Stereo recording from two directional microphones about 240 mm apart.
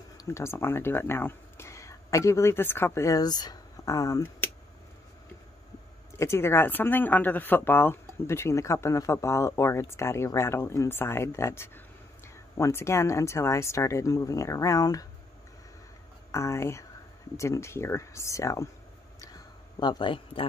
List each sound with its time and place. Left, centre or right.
0.2 s speech: centre
6.1 s speech: centre
16.3 s speech: centre
19.2 s a sound: centre